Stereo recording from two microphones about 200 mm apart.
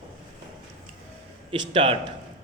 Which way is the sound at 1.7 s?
25° right (ahead or behind).